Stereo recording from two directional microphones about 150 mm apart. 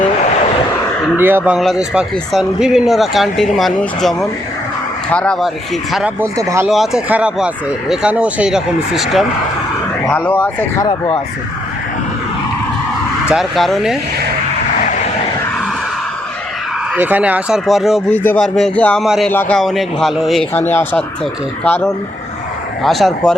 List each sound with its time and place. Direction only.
1.2 s speech: 15° right (ahead or behind)
1.5 s speech: 5° right (ahead or behind)
6.1 s speech: 20° right (ahead or behind)
6.7 s speech: centre (ahead or behind)
10.1 s speech: 10° left (ahead or behind)
10.8 s speech: 30° left (ahead or behind)
13.3 s speech: centre (ahead or behind)
16.9 s speech: 10° right (ahead or behind)
18.1 s speech: 10° left (ahead or behind)
19.3 s speech: 15° left (ahead or behind)
19.5 s speech: centre (ahead or behind)
20.5 s speech: 15° left (ahead or behind)